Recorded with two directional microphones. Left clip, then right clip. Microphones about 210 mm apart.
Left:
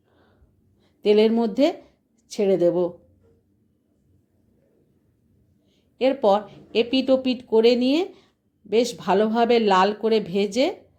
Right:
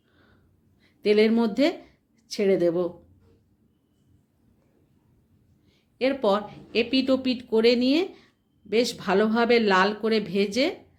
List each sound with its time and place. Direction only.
0.8 s speech: 20° left (ahead or behind)
6.0 s speech: 20° left (ahead or behind)